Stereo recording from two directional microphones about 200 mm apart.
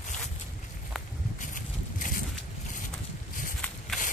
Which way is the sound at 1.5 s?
40° left (ahead or behind).